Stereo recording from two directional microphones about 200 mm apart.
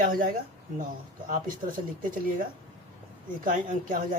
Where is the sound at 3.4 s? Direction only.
40° right (ahead or behind).